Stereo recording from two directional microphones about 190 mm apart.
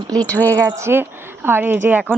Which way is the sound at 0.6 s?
10° right (ahead or behind).